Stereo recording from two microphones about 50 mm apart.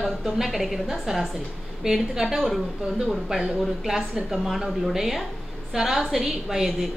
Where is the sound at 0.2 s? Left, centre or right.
Centre.